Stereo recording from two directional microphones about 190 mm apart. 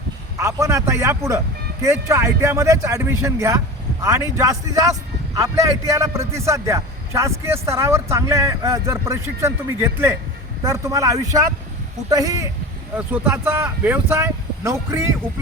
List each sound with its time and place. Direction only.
0.3 s a man's voice: 15° right (ahead or behind)